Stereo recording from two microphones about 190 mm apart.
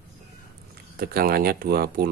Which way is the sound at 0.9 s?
50° right (ahead or behind).